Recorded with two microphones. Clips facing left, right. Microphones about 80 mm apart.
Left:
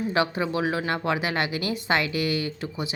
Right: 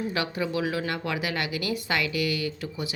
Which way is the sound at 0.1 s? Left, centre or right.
Left.